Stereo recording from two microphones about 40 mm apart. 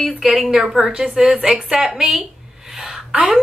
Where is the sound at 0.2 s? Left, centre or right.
Centre.